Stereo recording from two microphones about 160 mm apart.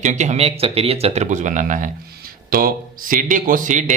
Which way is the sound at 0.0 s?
45° right (ahead or behind).